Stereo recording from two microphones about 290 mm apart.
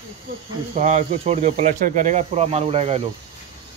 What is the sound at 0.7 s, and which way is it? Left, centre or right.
Speech, right.